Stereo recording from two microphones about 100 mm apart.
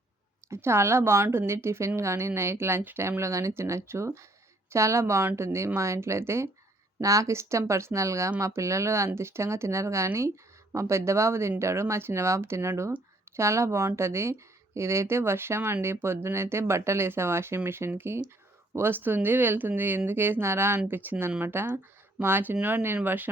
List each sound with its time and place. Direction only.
0.5 s a woman's voice: 25° right (ahead or behind)